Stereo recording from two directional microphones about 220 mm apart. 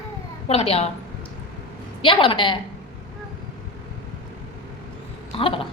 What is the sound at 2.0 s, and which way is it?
Speech, 25° left (ahead or behind).